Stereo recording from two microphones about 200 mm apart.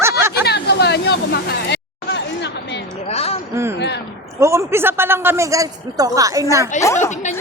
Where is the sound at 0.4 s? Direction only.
55° left (ahead or behind).